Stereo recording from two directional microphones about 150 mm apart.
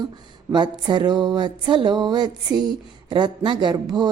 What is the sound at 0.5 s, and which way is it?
A woman's voice, 30° right (ahead or behind).